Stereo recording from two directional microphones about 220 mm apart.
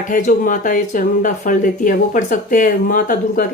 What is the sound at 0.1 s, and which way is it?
Speech, 40° left (ahead or behind).